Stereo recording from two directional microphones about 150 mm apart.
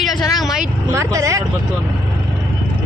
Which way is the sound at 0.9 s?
20° right (ahead or behind).